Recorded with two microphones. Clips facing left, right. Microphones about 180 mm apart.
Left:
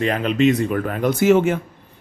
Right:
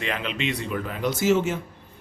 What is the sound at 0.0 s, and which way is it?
Speech, 45° left (ahead or behind).